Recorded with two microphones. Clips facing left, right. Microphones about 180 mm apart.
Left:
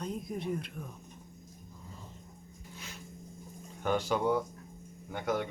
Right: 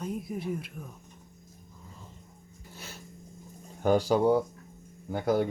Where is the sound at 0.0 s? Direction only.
5° right (ahead or behind).